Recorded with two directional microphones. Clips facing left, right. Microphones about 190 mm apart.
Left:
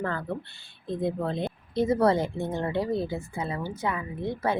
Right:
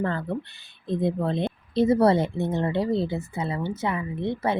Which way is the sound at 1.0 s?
25° right (ahead or behind).